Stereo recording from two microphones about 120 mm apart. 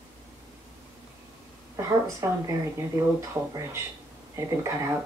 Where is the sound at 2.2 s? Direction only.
25° right (ahead or behind).